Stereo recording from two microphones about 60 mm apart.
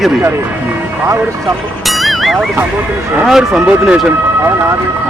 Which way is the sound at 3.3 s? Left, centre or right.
Centre.